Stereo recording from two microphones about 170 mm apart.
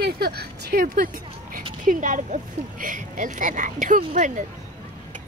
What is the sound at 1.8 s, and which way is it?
Speech, 50° right (ahead or behind).